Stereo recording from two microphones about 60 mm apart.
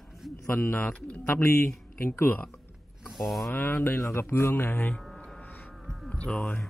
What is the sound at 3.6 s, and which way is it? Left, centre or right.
Speech, left.